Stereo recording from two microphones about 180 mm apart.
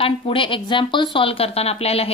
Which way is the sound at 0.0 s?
30° left (ahead or behind).